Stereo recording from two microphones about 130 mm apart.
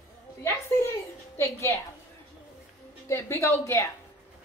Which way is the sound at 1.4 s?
25° left (ahead or behind).